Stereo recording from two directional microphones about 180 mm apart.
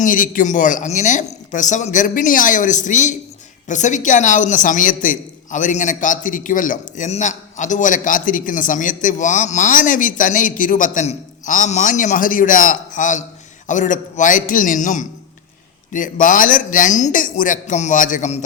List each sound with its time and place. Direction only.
0.0 s a woman's voice: 50° left (ahead or behind)